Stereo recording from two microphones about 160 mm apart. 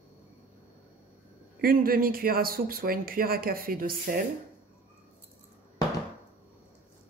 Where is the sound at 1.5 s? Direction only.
65° right (ahead or behind).